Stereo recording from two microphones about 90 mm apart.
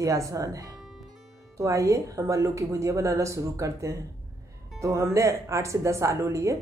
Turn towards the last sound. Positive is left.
turn(degrees=-35)  # may be behind; listen again after turning